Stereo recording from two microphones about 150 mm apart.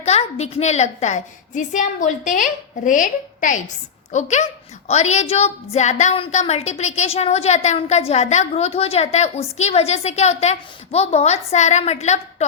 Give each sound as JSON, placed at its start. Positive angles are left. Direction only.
{"t": 0.0, "sound": "a woman's voice", "side_deg": 45}